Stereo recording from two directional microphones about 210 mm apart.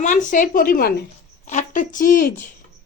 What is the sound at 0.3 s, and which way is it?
A woman's voice, 40° left (ahead or behind).